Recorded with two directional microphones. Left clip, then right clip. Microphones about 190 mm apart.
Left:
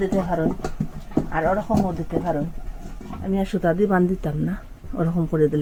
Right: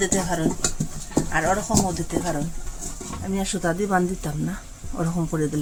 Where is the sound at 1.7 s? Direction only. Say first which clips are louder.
Left 1 dB; centre (ahead or behind).